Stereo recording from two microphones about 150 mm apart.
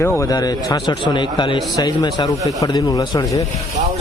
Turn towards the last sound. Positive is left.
turn(degrees=25)  # may be behind; listen again after turning